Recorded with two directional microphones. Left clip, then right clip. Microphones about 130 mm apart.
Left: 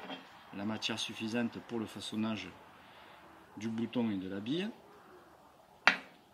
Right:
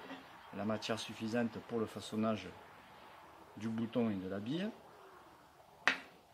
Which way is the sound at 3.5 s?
55° right (ahead or behind).